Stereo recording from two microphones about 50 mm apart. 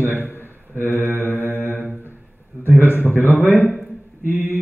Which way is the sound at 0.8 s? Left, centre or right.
Right.